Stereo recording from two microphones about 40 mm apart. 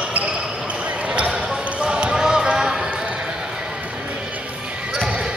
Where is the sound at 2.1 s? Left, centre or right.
Centre.